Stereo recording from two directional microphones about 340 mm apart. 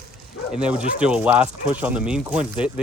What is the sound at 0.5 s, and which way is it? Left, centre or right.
Speech, centre.